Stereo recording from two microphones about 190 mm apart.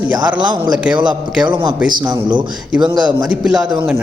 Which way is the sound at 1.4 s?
25° right (ahead or behind).